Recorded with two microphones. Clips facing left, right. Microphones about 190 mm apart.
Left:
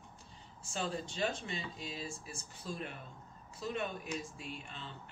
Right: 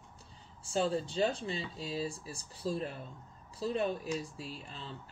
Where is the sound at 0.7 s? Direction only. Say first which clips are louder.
Right 7 dB; 30° right (ahead or behind).